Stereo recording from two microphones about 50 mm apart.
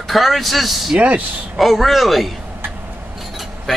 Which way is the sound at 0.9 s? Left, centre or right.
Right.